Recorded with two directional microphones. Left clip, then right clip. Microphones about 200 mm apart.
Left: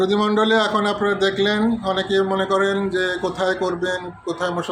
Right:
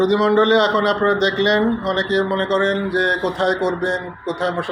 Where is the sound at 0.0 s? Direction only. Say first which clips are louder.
Right 3 dB; 15° left (ahead or behind).